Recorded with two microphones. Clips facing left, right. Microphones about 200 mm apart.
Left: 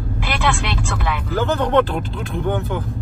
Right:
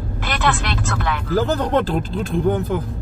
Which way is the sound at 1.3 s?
40° right (ahead or behind).